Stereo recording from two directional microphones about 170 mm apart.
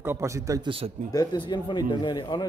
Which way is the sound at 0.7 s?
35° right (ahead or behind).